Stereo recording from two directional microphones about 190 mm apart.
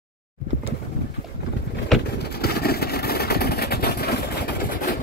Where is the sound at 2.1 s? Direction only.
55° left (ahead or behind).